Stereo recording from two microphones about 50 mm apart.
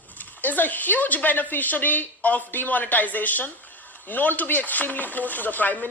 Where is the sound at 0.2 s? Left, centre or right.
Left.